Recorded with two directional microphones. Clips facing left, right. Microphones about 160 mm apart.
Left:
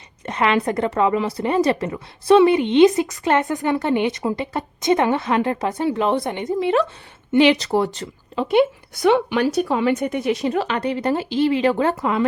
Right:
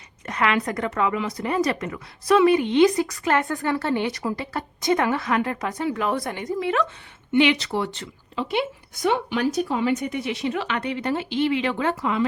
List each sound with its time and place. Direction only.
0.3 s a woman's voice: 25° left (ahead or behind)
7.3 s speech: 35° left (ahead or behind)
9.0 s a woman's voice: 90° left; by 12.2 s 50° left (ahead or behind)